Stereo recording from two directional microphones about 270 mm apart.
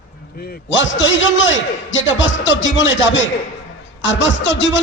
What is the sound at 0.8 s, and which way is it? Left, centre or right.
A man's voice, left.